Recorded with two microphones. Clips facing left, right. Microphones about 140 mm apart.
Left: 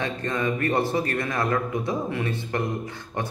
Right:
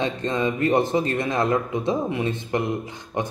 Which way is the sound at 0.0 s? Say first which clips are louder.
Right 3 dB; 20° right (ahead or behind).